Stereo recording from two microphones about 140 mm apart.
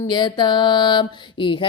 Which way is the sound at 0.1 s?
35° left (ahead or behind).